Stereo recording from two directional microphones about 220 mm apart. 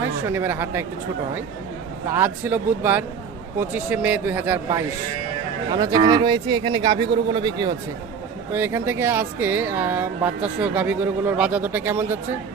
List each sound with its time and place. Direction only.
0.3 s speech: 10° right (ahead or behind)
2.1 s speech: 10° right (ahead or behind)